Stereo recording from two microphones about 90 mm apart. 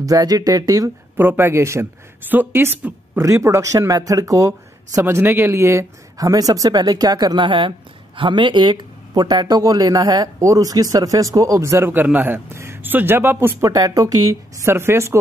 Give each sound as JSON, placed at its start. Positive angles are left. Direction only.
{"t": 0.0, "sound": "a woman's voice", "side_deg": -45}
{"t": 1.1, "sound": "a woman's voice", "side_deg": -25}
{"t": 5.0, "sound": "speech", "side_deg": -25}
{"t": 11.9, "sound": "a man's voice", "side_deg": -20}
{"t": 13.7, "sound": "a woman's voice", "side_deg": -40}
{"t": 14.7, "sound": "a man's voice", "side_deg": -25}